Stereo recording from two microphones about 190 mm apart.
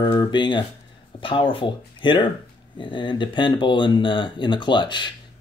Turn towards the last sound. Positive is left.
turn(degrees=25)  # may be behind; listen again after turning